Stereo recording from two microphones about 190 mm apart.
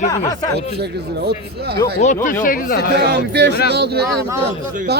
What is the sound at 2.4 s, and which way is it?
Speech, 45° left (ahead or behind).